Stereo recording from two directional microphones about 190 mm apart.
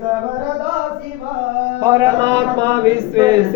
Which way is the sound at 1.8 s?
15° right (ahead or behind).